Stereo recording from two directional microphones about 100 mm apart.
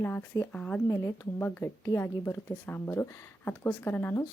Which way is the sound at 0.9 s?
35° left (ahead or behind).